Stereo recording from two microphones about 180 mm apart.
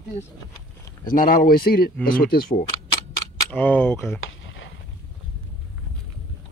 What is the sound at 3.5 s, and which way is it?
Speech, 10° left (ahead or behind).